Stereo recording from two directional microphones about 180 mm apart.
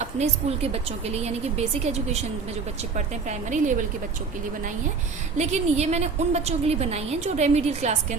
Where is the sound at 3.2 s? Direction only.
45° right (ahead or behind).